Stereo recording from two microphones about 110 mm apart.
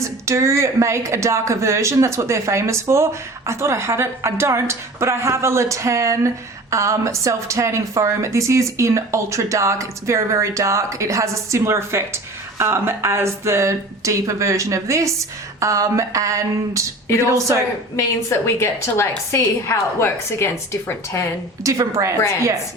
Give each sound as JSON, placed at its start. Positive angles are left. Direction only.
{"t": 0.3, "sound": "speech", "side_deg": -25}
{"t": 17.9, "sound": "a woman's voice", "side_deg": 25}
{"t": 21.6, "sound": "speech", "side_deg": -30}